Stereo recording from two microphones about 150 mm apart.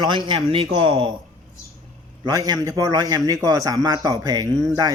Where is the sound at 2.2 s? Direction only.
25° right (ahead or behind).